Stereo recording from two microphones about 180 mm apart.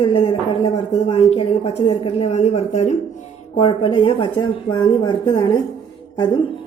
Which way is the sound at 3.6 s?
30° left (ahead or behind).